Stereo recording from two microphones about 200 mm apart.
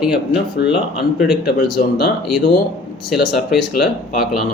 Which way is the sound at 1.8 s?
40° left (ahead or behind).